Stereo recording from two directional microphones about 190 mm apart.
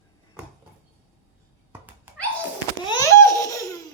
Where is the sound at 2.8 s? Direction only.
20° left (ahead or behind).